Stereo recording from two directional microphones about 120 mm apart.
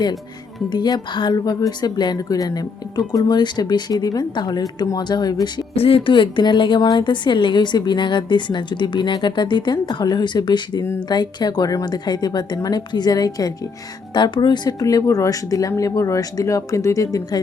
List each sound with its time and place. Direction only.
0.7 s a woman's voice: 35° left (ahead or behind)
5.7 s a woman's voice: 55° left (ahead or behind); by 17.4 s 30° left (ahead or behind)